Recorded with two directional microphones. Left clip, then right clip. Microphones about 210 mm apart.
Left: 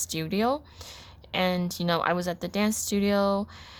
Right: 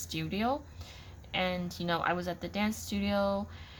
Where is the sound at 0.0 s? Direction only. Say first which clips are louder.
Left 6 dB; 50° left (ahead or behind).